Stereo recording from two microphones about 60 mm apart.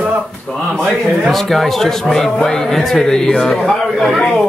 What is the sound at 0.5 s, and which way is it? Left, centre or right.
Speech, centre.